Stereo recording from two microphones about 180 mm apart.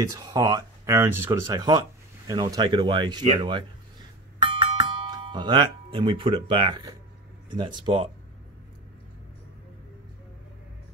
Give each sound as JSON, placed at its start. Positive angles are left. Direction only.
{"t": 0.0, "sound": "speech", "side_deg": -20}
{"t": 4.4, "sound": "doorbell", "side_deg": -30}
{"t": 5.1, "sound": "speech", "side_deg": -25}